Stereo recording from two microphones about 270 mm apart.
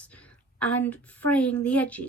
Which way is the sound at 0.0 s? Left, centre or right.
Centre.